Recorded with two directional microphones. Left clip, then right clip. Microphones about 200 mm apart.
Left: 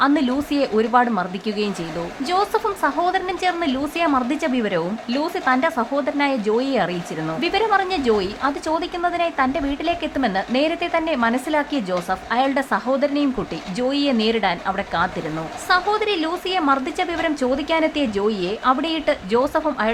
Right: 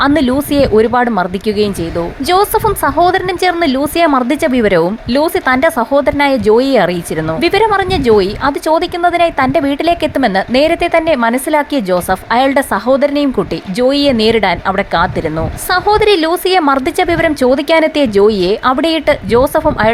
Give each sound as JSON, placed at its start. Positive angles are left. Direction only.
{"t": 0.0, "sound": "a woman's voice", "side_deg": -30}